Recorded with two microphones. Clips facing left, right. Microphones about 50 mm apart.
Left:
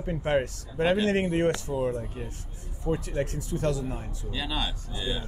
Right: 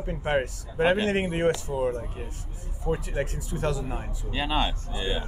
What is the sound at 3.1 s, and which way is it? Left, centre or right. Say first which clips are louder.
Speech: left 1 dB; right.